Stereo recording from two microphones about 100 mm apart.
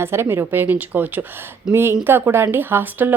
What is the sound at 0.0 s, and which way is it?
Speech, 25° right (ahead or behind).